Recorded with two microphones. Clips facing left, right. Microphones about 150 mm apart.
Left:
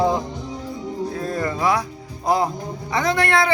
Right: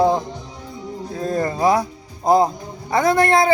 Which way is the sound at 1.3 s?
40° right (ahead or behind).